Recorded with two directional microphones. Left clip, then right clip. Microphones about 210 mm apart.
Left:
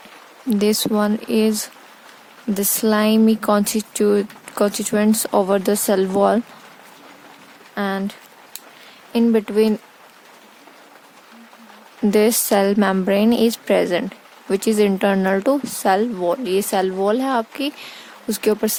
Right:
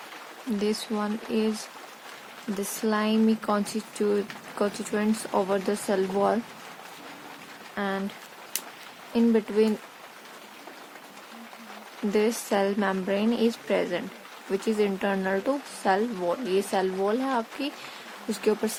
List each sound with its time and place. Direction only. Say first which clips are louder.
0.6 s speech: left 10 dB; 50° left (ahead or behind)
2.6 s speech: left 9 dB; 50° left (ahead or behind)
7.8 s speech: left 7 dB; 50° left (ahead or behind)
9.1 s speech: left 6 dB; 50° left (ahead or behind)
12.1 s speech: left 9 dB; 50° left (ahead or behind)